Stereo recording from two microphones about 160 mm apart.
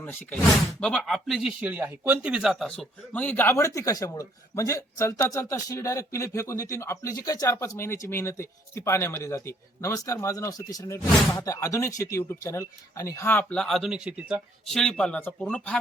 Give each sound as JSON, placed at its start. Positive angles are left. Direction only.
{"t": 0.0, "sound": "speech", "side_deg": 10}